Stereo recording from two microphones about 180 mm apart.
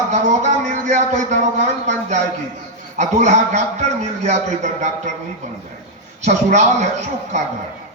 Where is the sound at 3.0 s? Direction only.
40° right (ahead or behind).